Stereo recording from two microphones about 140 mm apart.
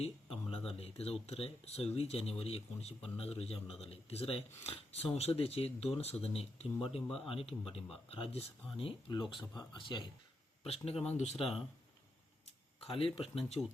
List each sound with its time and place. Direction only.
0.0 s speech: 40° left (ahead or behind)
10.6 s speech: 45° left (ahead or behind)
11.4 s speech: 5° right (ahead or behind)
13.1 s speech: 45° left (ahead or behind)